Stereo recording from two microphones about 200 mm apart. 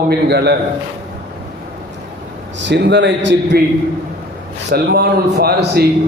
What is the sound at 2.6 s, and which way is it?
A man's voice, 60° right (ahead or behind).